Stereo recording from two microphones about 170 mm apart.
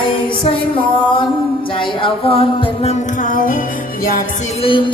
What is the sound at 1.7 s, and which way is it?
Music, 30° left (ahead or behind).